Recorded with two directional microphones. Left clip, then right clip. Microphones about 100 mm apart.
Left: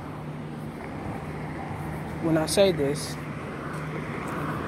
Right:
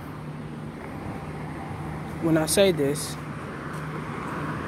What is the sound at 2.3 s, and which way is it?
Speech, 90° right.